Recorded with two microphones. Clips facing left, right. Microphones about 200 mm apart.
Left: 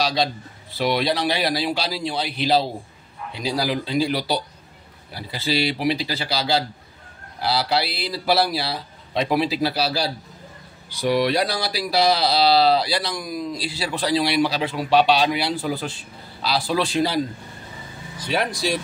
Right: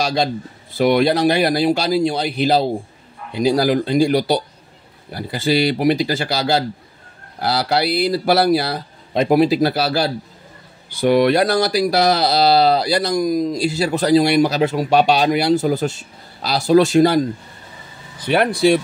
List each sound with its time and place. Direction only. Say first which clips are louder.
0.0 s a man's voice: right 3 dB; 50° right (ahead or behind)
18.2 s speech: right 9 dB; 60° right (ahead or behind)